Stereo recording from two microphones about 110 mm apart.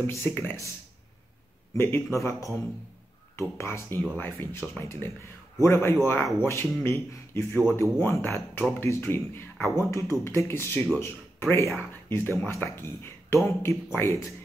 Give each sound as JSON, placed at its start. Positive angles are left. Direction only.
{"t": 0.0, "sound": "a man's voice", "side_deg": 20}
{"t": 1.8, "sound": "a man's voice", "side_deg": 20}